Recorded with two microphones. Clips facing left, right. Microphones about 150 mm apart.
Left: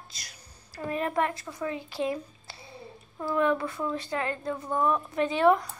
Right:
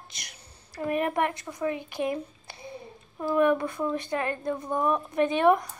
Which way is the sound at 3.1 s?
15° right (ahead or behind).